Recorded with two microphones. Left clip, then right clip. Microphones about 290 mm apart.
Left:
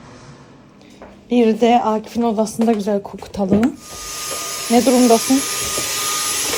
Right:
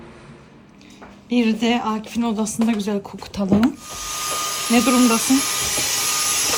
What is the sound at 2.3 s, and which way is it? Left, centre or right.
Speech, right.